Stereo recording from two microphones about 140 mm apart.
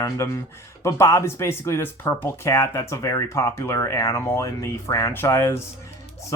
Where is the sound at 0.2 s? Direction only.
20° left (ahead or behind).